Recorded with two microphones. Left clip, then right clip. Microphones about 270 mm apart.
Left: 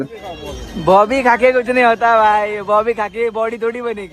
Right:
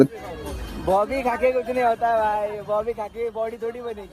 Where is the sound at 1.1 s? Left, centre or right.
Left.